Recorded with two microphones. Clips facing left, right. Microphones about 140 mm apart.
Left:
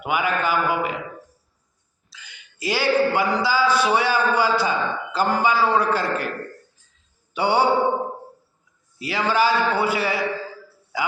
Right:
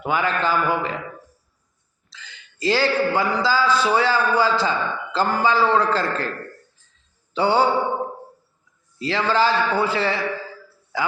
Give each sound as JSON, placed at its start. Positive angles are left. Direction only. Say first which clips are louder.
{"t": 0.0, "sound": "a man's voice", "louder": "right 1 dB", "side_deg": 15}
{"t": 2.1, "sound": "a man's voice", "louder": "right 2 dB", "side_deg": 15}
{"t": 7.3, "sound": "a man's voice", "louder": "right 1 dB", "side_deg": 15}
{"t": 9.0, "sound": "a man's voice", "louder": "right 1 dB", "side_deg": 15}